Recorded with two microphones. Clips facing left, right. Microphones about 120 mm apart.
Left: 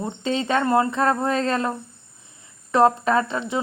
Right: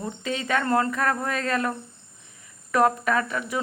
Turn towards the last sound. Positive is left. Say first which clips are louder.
# left 4 dB
turn(degrees=25)  # may be behind; listen again after turning